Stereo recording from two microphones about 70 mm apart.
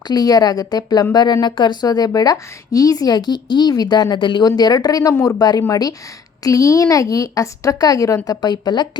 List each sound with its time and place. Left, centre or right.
0.1 s a woman's voice: left
1.1 s a woman's voice: left